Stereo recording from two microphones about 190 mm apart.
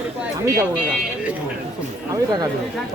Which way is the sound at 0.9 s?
5° right (ahead or behind).